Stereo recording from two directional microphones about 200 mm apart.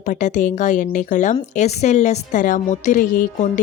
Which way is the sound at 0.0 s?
40° left (ahead or behind).